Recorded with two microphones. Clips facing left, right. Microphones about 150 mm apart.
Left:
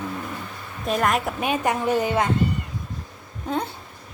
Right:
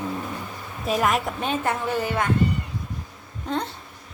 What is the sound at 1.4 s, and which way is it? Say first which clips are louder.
Speech: left 2 dB; 15° left (ahead or behind).